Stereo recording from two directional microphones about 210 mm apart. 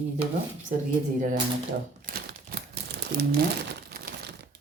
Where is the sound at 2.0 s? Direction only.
45° right (ahead or behind).